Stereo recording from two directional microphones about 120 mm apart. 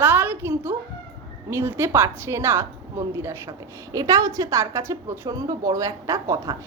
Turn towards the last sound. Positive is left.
turn(degrees=-30)  # may be behind; listen again after turning